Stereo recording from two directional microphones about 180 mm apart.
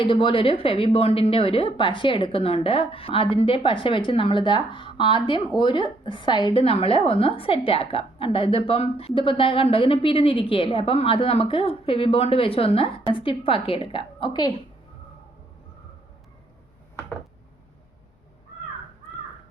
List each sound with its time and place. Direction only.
0.0 s a woman's voice: 30° left (ahead or behind)